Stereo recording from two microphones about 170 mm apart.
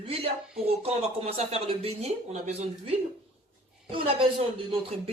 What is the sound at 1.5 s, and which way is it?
Speech, 35° right (ahead or behind).